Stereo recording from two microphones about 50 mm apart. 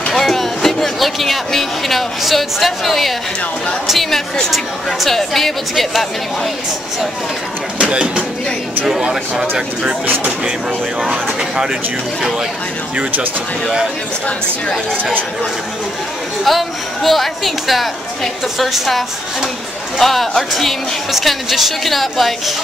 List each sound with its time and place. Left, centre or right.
0.1 s a woman's voice: centre
7.8 s speech: centre
11.1 s speech: centre
14.2 s a woman's voice: centre
16.4 s a woman's voice: centre